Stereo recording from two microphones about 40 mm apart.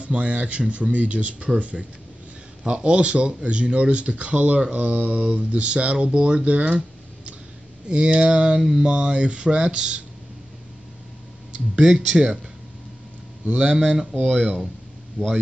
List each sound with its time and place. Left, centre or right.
0.0 s speech: right
7.9 s speech: right
8.5 s mantra: centre
8.8 s speech: right
11.5 s speech: centre
13.5 s speech: right
15.2 s speech: right